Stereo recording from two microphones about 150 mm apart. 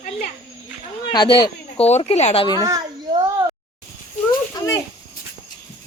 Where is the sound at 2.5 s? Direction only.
25° right (ahead or behind).